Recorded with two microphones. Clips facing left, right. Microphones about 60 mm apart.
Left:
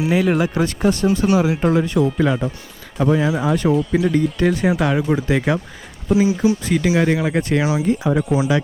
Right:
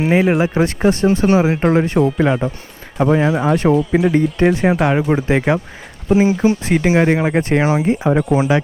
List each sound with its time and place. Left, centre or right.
0.0 s speech: right
6.1 s speech: right